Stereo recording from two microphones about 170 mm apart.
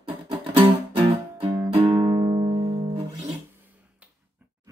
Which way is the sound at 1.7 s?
35° right (ahead or behind).